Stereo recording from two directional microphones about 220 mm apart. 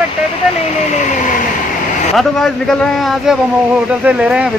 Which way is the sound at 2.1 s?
Centre (ahead or behind).